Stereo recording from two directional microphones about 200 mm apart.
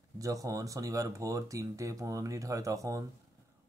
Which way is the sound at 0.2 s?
15° right (ahead or behind).